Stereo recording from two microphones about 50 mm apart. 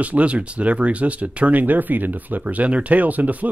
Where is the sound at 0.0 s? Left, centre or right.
Right.